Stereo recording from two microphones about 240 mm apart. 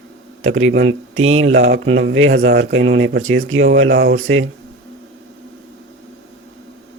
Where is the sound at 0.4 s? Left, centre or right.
Right.